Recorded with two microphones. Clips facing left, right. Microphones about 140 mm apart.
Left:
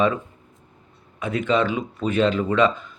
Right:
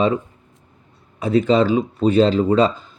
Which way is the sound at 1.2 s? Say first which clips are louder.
Right 6 dB; 35° right (ahead or behind).